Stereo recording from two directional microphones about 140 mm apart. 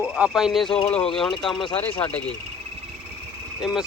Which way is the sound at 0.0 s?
5° right (ahead or behind).